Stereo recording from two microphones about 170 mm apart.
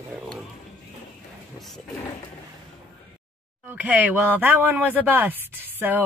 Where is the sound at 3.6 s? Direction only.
10° right (ahead or behind).